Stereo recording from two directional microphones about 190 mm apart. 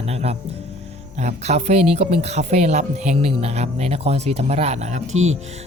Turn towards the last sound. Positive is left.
turn(degrees=-35)  # may be behind; listen again after turning